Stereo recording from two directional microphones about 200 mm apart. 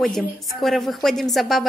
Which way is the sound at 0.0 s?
Centre (ahead or behind).